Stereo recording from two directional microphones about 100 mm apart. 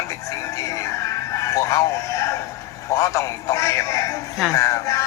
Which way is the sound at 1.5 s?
30° left (ahead or behind).